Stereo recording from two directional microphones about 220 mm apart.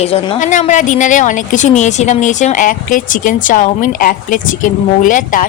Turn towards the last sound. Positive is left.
turn(degrees=35)  # may be behind; listen again after turning